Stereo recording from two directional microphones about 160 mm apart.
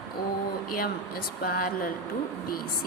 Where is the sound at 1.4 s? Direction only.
65° left (ahead or behind).